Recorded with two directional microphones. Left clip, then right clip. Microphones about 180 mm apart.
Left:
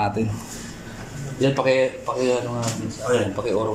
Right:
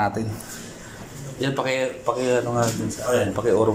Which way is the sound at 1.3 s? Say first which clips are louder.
Left 5 dB; centre (ahead or behind).